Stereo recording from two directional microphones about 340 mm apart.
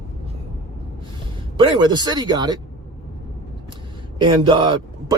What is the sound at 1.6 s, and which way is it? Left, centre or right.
Speech, centre.